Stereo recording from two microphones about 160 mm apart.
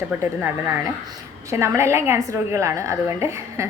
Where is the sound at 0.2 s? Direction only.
15° right (ahead or behind).